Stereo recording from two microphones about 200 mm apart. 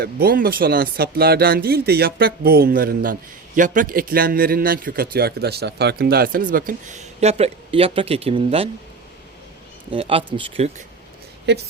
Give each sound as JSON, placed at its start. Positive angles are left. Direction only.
{"t": 0.0, "sound": "speech", "side_deg": -50}
{"t": 7.2, "sound": "speech", "side_deg": -30}
{"t": 9.9, "sound": "speech", "side_deg": -25}
{"t": 11.5, "sound": "a woman's voice", "side_deg": -60}